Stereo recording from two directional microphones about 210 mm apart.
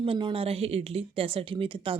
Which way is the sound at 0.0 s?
25° right (ahead or behind).